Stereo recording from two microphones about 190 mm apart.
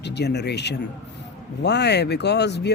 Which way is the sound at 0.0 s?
60° left (ahead or behind).